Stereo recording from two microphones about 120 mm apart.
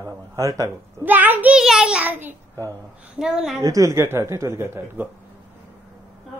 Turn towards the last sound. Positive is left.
turn(degrees=-20)  # may be behind; listen again after turning